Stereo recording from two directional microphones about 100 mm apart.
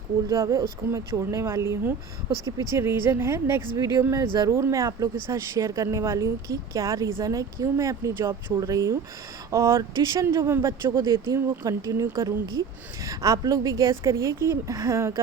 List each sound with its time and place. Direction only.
0.3 s a woman's voice: 35° right (ahead or behind)
11.0 s a woman's voice: 40° right (ahead or behind)